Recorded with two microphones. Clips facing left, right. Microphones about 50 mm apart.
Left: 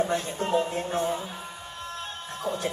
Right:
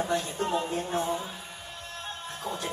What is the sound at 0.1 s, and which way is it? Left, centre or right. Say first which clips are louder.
Music: left 2 dB; left.